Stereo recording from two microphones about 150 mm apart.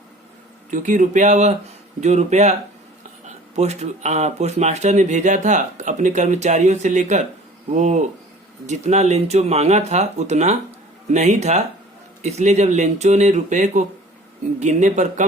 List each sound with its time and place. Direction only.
0.7 s speech: 55° right (ahead or behind)